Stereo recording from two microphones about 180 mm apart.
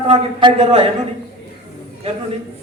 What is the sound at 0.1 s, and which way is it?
Speech, 35° right (ahead or behind).